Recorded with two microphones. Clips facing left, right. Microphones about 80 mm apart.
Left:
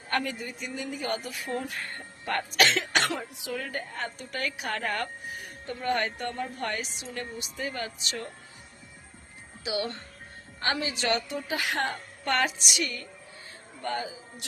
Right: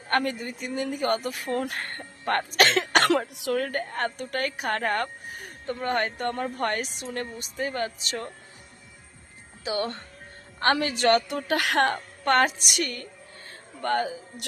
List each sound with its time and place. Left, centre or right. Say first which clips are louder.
0.1 s a woman's voice: right 4 dB; right
3.1 s a woman's voice: right 9 dB; right
9.6 s speech: right 3 dB; right
10.6 s a woman's voice: right 6 dB; right
12.2 s a woman's voice: right 5 dB; right